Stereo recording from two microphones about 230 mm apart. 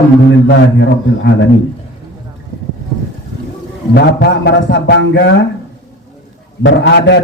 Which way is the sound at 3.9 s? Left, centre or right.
Left.